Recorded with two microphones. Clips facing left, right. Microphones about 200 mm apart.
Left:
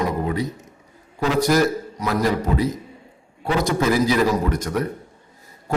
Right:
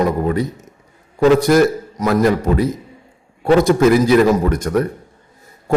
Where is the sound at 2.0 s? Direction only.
50° right (ahead or behind).